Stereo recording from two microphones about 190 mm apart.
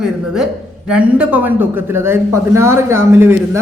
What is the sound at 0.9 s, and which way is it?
A man's voice, 5° right (ahead or behind).